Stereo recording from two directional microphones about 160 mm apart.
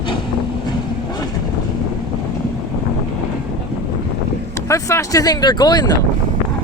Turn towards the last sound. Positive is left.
turn(degrees=25)  # may be behind; listen again after turning